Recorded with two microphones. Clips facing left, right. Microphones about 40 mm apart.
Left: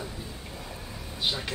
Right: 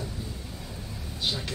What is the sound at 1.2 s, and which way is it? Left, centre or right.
Speech, centre.